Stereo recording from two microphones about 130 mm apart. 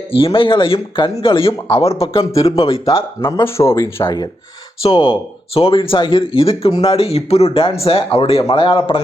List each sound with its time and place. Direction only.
0.1 s speech: 45° left (ahead or behind)
3.4 s speech: 20° left (ahead or behind)
4.0 s speech: 30° left (ahead or behind)
4.8 s speech: 45° left (ahead or behind)